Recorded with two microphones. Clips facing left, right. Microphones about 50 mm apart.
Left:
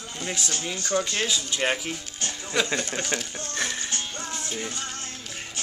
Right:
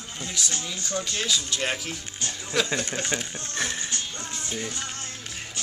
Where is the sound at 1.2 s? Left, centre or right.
Centre.